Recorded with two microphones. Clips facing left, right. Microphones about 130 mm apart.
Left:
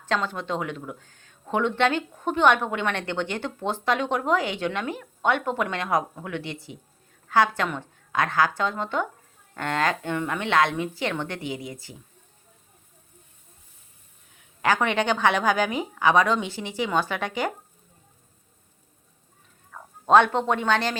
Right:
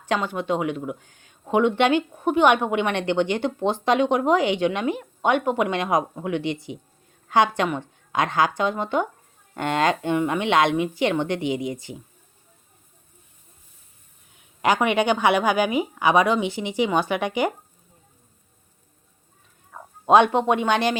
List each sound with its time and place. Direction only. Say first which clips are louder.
0.0 s a woman's voice: right 2 dB; 15° right (ahead or behind)
14.3 s speech: right 2 dB; 15° right (ahead or behind)
19.7 s speech: right 2 dB; 15° right (ahead or behind)